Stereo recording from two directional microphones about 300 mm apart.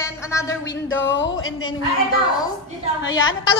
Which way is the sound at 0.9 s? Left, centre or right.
Left.